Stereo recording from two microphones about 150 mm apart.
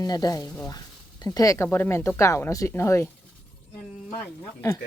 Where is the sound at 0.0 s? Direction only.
25° left (ahead or behind).